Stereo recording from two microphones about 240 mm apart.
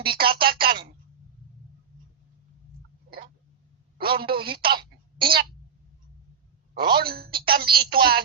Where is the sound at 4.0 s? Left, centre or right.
Right.